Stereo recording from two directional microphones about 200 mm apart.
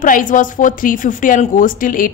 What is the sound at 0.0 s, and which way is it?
A woman's voice, 40° left (ahead or behind).